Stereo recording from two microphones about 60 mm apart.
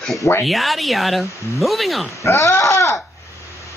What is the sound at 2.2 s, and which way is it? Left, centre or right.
Speech, left.